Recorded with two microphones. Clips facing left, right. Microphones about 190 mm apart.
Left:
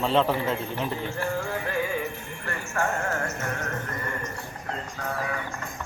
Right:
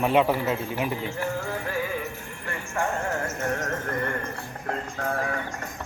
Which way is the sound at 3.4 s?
40° right (ahead or behind).